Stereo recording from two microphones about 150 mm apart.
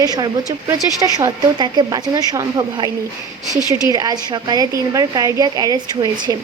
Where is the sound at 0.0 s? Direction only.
25° right (ahead or behind).